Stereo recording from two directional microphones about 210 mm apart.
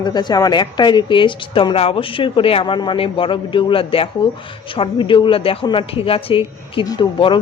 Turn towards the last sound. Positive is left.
turn(degrees=20)  # may be behind; listen again after turning